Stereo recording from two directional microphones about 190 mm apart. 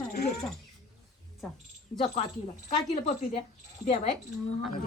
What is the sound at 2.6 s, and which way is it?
Speech, 35° left (ahead or behind).